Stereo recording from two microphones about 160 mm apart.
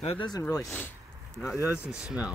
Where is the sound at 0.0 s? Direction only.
35° left (ahead or behind).